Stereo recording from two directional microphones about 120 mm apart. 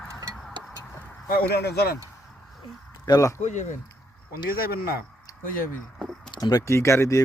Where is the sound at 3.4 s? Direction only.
80° left.